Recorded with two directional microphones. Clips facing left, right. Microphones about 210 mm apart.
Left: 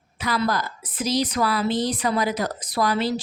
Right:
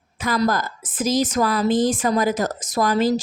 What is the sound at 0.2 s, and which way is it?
A woman's voice, 45° right (ahead or behind).